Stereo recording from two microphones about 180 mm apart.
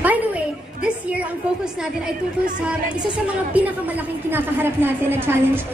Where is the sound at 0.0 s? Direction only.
10° right (ahead or behind).